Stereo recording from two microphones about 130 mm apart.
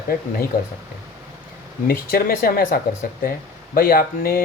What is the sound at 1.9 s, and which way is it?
Speech, 90° left.